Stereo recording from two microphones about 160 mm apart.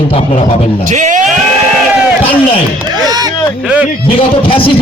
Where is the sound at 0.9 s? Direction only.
50° right (ahead or behind).